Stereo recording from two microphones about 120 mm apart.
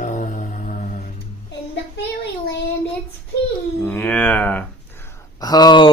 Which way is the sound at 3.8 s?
15° left (ahead or behind).